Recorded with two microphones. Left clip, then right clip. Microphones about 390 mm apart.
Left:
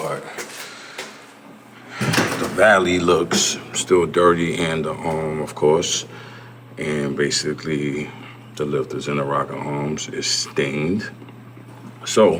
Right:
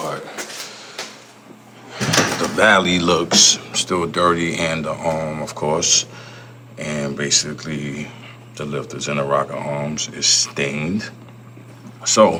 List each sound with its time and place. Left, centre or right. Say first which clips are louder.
0.0 s drawer open or close: even; centre
2.6 s speech: even; centre